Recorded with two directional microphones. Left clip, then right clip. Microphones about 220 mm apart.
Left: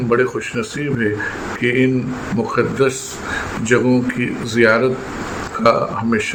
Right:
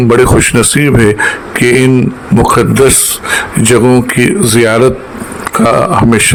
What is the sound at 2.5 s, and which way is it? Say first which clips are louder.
Speech: right 9 dB; 45° right (ahead or behind).